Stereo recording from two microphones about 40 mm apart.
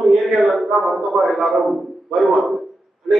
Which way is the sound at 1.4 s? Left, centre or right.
Centre.